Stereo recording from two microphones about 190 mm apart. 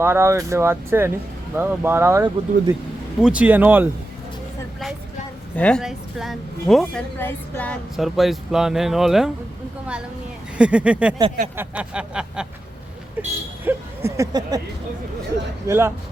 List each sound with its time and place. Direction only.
0.0 s speech: 15° right (ahead or behind)
3.2 s speech: 5° right (ahead or behind)
5.5 s speech: 5° left (ahead or behind)
10.6 s speech: 5° right (ahead or behind)
13.7 s a sound: 15° right (ahead or behind)
15.6 s speech: 15° right (ahead or behind)